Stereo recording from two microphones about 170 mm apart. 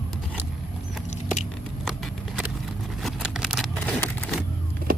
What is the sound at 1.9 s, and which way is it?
Horse, centre (ahead or behind).